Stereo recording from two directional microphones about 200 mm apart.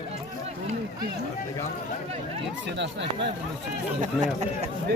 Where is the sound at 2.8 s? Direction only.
60° right (ahead or behind).